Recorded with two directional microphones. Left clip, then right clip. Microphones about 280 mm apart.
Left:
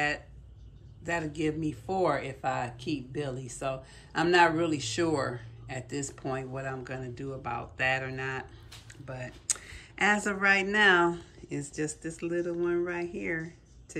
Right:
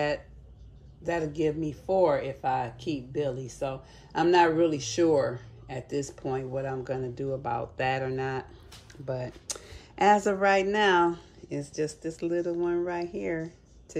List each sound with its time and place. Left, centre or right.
1.0 s speech: centre
2.0 s speech: right
2.4 s speech: centre